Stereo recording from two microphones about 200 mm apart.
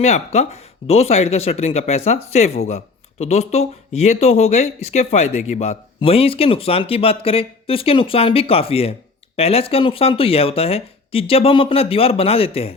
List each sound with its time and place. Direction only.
0.0 s speech: 35° left (ahead or behind)